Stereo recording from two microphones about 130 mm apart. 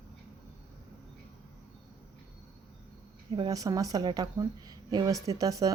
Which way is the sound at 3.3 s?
35° right (ahead or behind).